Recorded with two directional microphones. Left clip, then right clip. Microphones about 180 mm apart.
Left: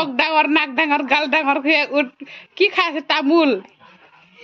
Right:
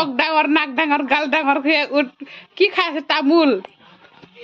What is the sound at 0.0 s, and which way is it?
A man's voice, centre (ahead or behind).